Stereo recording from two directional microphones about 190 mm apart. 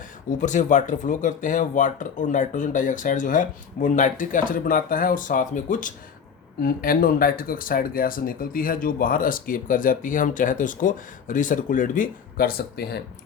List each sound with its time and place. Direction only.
0.3 s speech: 40° left (ahead or behind); by 13.0 s 55° left (ahead or behind)